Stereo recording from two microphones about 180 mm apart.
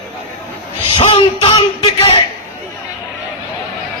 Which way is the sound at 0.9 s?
35° left (ahead or behind).